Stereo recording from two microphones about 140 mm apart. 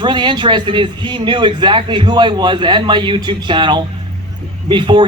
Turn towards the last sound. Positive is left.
turn(degrees=-35)  # may be behind; listen again after turning